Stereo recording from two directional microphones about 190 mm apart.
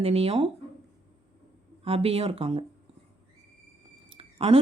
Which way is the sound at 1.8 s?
30° right (ahead or behind).